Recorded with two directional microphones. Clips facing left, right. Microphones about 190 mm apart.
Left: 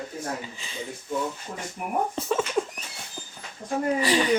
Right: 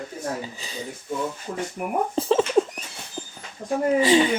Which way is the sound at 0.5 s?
40° right (ahead or behind).